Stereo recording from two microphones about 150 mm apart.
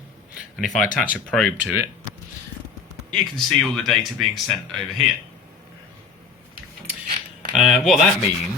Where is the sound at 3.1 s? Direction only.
Centre (ahead or behind).